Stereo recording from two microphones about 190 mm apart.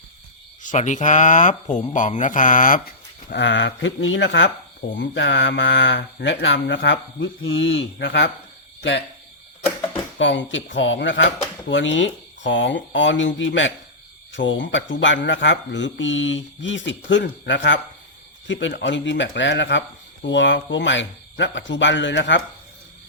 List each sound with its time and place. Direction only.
0.6 s speech: 40° left (ahead or behind); by 8.3 s 65° left (ahead or behind)
10.2 s speech: 75° left (ahead or behind)